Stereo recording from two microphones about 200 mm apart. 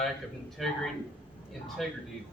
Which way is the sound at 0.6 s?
Centre (ahead or behind).